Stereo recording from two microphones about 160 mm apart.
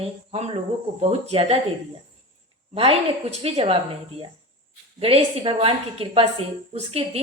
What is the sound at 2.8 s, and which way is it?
A woman's voice, 40° right (ahead or behind).